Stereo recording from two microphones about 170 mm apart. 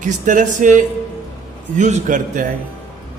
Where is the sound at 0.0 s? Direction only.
50° right (ahead or behind).